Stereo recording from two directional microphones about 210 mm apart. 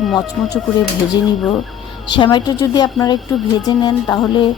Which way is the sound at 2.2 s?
20° left (ahead or behind).